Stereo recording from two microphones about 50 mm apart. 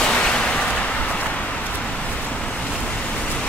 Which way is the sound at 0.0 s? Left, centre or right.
Centre.